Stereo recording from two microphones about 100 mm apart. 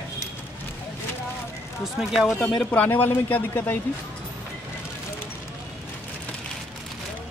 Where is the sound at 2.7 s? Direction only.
15° left (ahead or behind).